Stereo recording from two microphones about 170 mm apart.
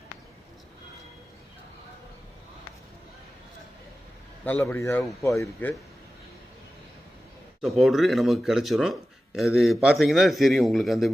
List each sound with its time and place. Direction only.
4.4 s a man's voice: 15° left (ahead or behind)
7.6 s speech: centre (ahead or behind)